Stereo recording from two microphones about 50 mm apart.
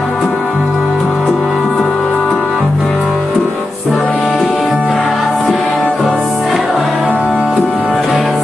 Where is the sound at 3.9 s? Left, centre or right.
Centre.